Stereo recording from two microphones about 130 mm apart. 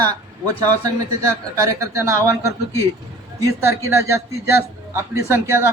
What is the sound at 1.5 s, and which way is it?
A man's voice, 25° right (ahead or behind).